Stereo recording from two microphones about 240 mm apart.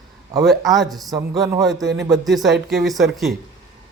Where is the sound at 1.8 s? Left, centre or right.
Right.